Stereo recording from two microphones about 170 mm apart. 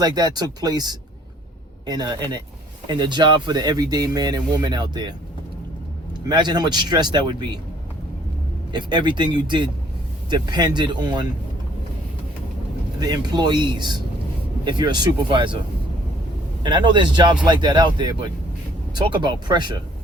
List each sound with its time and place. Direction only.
0.0 s speech: 25° right (ahead or behind)
6.2 s speech: 25° right (ahead or behind)
8.7 s speech: 25° right (ahead or behind)
13.0 s speech: 25° right (ahead or behind)
16.6 s speech: 25° right (ahead or behind)